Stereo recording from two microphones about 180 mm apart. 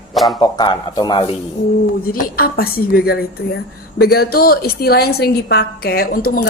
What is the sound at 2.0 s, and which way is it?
A woman's voice, 55° left (ahead or behind).